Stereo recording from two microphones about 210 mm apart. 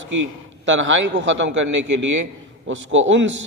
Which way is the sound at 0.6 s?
65° right (ahead or behind).